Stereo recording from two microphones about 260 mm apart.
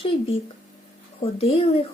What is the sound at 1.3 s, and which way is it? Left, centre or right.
Speech, left.